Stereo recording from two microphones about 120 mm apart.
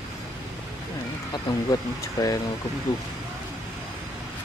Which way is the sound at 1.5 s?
35° left (ahead or behind).